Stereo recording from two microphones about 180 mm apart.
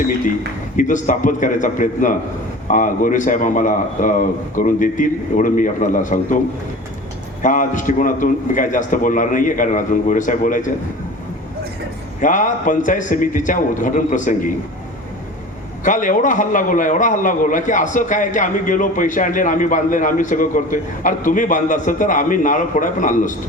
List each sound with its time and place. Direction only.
0.8 s a man's voice: 45° left (ahead or behind)
7.4 s a man's voice: 45° left (ahead or behind)
12.2 s a man's voice: 45° left (ahead or behind)
15.8 s a man's voice: 45° left (ahead or behind)